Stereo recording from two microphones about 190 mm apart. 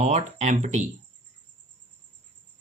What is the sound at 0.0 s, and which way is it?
Speech, 35° right (ahead or behind).